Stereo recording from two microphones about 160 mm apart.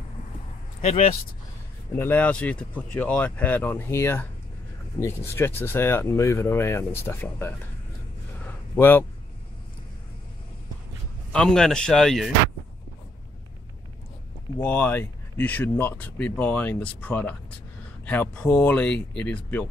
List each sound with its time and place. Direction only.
0.7 s speech: 45° left (ahead or behind)
1.9 s speech: 10° left (ahead or behind)
8.5 s a sound: 10° left (ahead or behind)
11.3 s speech: 5° left (ahead or behind)
14.6 s speech: 10° left (ahead or behind)